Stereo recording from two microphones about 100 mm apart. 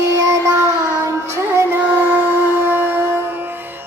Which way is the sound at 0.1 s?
30° right (ahead or behind).